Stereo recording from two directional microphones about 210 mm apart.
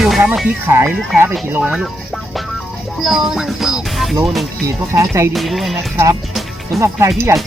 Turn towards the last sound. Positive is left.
turn(degrees=-15)  # may be behind; listen again after turning